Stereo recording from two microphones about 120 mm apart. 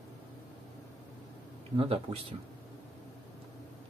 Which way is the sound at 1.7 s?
55° right (ahead or behind).